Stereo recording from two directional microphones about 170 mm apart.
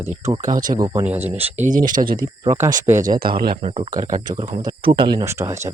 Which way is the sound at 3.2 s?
60° right (ahead or behind).